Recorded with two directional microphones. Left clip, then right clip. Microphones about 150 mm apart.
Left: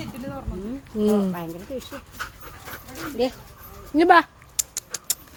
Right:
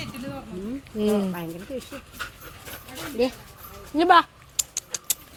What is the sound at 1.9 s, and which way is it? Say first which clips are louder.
Speech: left 1 dB; 5° right (ahead or behind).